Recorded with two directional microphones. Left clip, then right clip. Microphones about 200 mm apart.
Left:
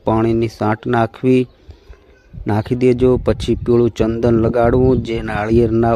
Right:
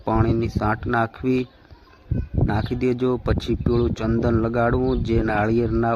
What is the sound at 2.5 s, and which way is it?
Speech, 50° left (ahead or behind).